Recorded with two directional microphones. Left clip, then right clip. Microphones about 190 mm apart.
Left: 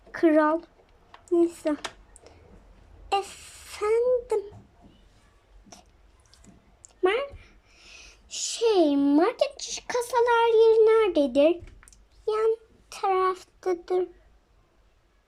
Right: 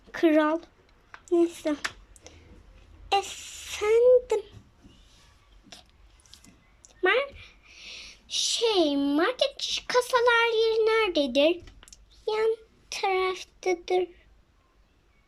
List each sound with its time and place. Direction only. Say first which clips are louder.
0.1 s speech: left 1 dB; centre (ahead or behind)
6.3 s a sound: right 3 dB; 5° left (ahead or behind)
9.6 s speech: right 5 dB; 45° right (ahead or behind)
9.8 s a child's voice: right 1 dB; 10° left (ahead or behind)